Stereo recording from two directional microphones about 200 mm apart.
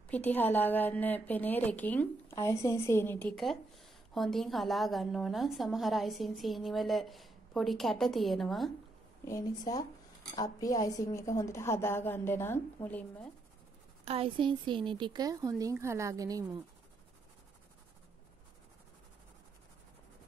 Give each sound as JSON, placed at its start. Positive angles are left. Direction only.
{"t": 0.1, "sound": "a woman's voice", "side_deg": 10}
{"t": 9.2, "sound": "a woman's voice", "side_deg": 15}
{"t": 14.0, "sound": "speech", "side_deg": -30}